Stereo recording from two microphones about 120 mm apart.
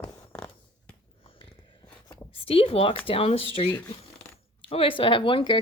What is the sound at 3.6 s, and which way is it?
A woman's voice, 55° left (ahead or behind).